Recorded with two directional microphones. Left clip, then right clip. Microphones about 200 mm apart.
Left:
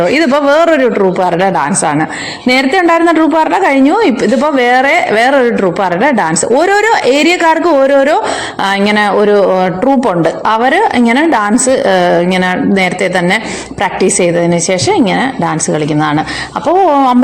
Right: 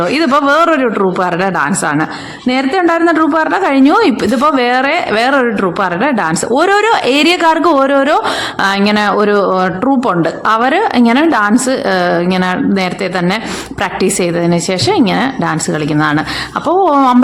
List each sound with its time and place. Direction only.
0.0 s a woman's voice: centre (ahead or behind)
16.6 s speech: 10° right (ahead or behind)